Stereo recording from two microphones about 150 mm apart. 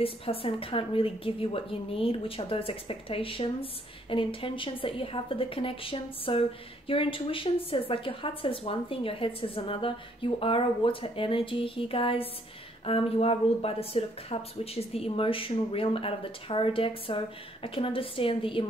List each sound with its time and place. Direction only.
0.0 s speech: 40° left (ahead or behind)